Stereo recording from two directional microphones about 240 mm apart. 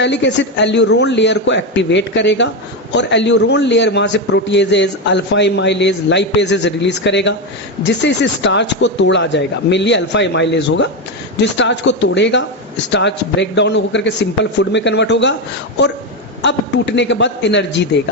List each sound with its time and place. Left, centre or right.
0.0 s a man's voice: left
16.4 s a man's voice: left